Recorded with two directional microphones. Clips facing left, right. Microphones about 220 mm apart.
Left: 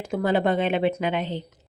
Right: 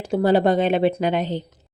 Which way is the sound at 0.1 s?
35° right (ahead or behind).